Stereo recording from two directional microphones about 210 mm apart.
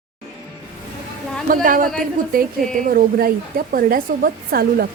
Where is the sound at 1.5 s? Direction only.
40° right (ahead or behind).